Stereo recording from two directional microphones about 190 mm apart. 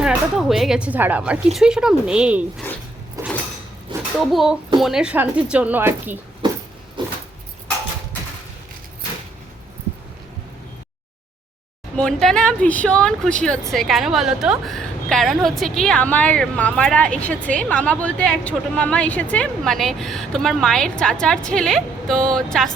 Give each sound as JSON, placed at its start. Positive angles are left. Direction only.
{"t": 0.0, "sound": "speech", "side_deg": -5}
{"t": 3.2, "sound": "a sound", "side_deg": -15}
{"t": 4.3, "sound": "speech", "side_deg": 0}
{"t": 7.0, "sound": "keys jangling", "side_deg": -25}
{"t": 11.9, "sound": "speech", "side_deg": 5}